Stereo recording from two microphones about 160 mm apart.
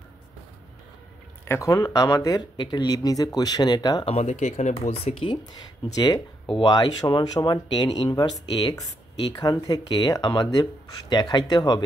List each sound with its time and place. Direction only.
1.4 s speech: 20° left (ahead or behind)
4.1 s speech: 45° left (ahead or behind)
5.9 s speech: 25° left (ahead or behind)